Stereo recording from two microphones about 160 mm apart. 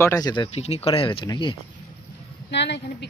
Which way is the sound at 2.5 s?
90° left.